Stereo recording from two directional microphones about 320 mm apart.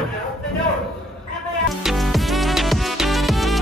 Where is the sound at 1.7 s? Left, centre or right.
Centre.